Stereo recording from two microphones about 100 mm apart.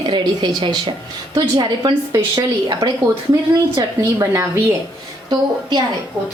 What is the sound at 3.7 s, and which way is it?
Speech, 30° right (ahead or behind).